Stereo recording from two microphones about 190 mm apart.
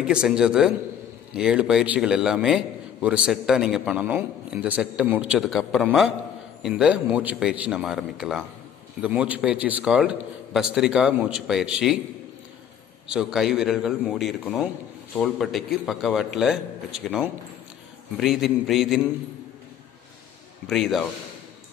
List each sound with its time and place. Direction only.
0.0 s a man's voice: 5° right (ahead or behind)
13.1 s a man's voice: 5° right (ahead or behind)
18.1 s a man's voice: centre (ahead or behind)
20.6 s a man's voice: centre (ahead or behind)